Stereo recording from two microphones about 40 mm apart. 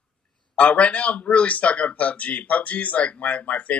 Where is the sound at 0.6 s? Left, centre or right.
Left.